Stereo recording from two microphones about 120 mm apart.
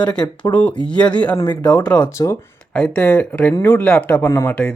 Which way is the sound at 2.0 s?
25° left (ahead or behind).